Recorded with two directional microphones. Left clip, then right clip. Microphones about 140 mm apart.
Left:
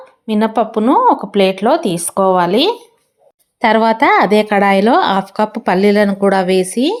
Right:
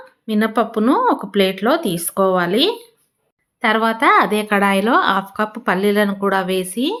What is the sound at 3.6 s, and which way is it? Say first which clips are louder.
Speech: left 4 dB; 35° left (ahead or behind).